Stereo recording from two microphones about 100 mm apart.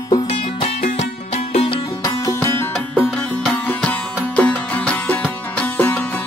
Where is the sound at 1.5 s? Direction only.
70° left (ahead or behind).